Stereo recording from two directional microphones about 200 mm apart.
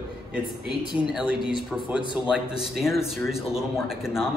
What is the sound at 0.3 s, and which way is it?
A man's voice, 5° right (ahead or behind).